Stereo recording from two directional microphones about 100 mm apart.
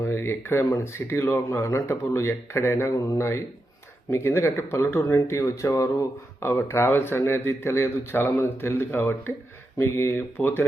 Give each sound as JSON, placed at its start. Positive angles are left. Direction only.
{"t": 0.0, "sound": "speech", "side_deg": 25}